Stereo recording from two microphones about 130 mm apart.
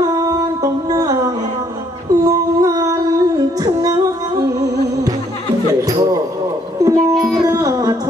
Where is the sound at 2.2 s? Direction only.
25° right (ahead or behind).